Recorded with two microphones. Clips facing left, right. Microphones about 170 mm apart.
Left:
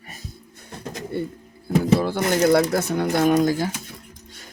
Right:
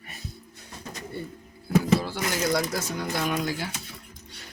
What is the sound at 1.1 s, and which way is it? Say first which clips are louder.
Bird: left 9 dB; 65° left (ahead or behind).